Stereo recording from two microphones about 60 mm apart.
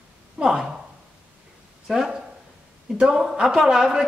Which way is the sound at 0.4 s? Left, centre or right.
Centre.